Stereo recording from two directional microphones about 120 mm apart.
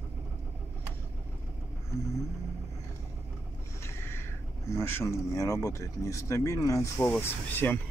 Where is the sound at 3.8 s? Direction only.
20° left (ahead or behind).